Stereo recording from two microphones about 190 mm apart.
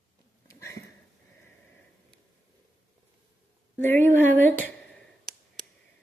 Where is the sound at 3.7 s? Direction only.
10° left (ahead or behind).